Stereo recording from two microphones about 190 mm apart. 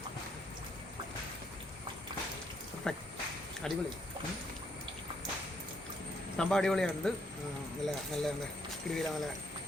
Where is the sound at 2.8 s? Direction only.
5° left (ahead or behind).